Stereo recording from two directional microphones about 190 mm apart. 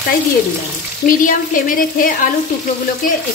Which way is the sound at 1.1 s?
45° left (ahead or behind).